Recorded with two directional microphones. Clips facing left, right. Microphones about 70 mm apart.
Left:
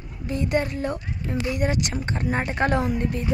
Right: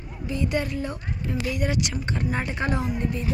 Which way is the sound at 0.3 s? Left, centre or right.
Left.